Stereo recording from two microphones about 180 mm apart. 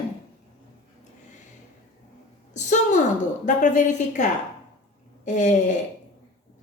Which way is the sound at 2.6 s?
40° left (ahead or behind).